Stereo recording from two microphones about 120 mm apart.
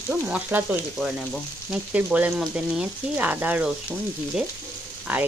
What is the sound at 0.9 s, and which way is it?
Frying, centre (ahead or behind).